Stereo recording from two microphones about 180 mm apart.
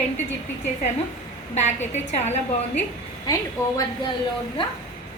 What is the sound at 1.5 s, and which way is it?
Speech, 40° left (ahead or behind).